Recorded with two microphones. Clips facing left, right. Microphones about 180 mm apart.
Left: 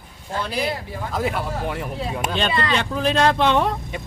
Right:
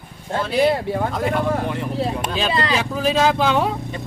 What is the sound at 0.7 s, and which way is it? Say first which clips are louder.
Speech: right 9 dB; 65° right (ahead or behind).